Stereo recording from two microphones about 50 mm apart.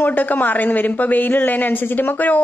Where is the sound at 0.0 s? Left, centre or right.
Left.